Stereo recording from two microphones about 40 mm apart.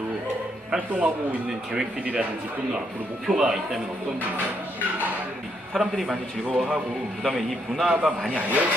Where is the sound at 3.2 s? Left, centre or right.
Centre.